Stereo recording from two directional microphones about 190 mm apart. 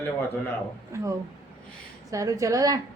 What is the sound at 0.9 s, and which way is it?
A woman's voice, 15° right (ahead or behind).